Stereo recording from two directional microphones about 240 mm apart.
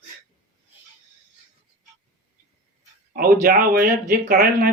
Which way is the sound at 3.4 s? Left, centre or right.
Right.